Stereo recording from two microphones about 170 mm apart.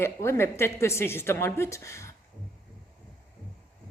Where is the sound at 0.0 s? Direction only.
15° left (ahead or behind).